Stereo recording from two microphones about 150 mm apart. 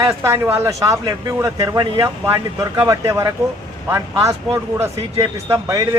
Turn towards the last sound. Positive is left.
turn(degrees=-20)  # may be behind; listen again after turning